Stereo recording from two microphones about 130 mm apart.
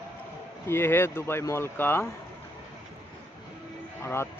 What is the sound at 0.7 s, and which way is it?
Speech, 15° left (ahead or behind).